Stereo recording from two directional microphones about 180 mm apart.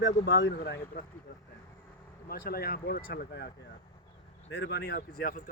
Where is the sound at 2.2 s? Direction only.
55° left (ahead or behind).